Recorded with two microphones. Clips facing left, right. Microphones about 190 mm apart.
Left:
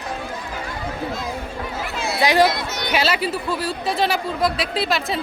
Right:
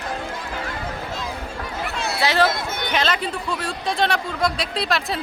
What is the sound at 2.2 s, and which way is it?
Speech, 15° left (ahead or behind).